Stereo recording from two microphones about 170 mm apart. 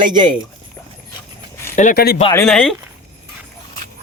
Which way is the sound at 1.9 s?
65° left (ahead or behind).